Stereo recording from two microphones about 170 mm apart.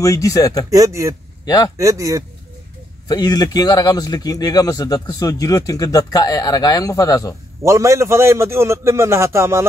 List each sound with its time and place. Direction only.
0.0 s a man's voice: 20° left (ahead or behind)
0.7 s speech: 20° right (ahead or behind)
1.4 s a man's voice: 20° left (ahead or behind)
1.8 s speech: 20° right (ahead or behind)
3.1 s a man's voice: 25° left (ahead or behind)
7.6 s a man's voice: 15° right (ahead or behind)